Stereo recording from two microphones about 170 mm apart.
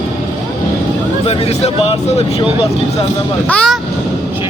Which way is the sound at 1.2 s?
40° left (ahead or behind).